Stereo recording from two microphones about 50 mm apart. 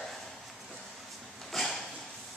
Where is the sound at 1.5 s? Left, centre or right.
Centre.